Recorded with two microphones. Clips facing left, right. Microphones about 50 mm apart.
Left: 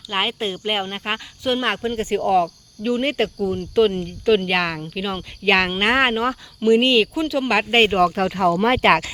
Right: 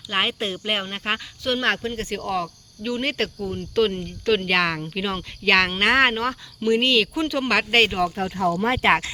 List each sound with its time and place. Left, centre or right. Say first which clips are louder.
0.1 s speech: left 1 dB; centre
5.5 s speech: left 1 dB; centre
7.1 s speech: left 2 dB; centre
7.9 s speech: left 6 dB; left
8.2 s speech: left 4 dB; left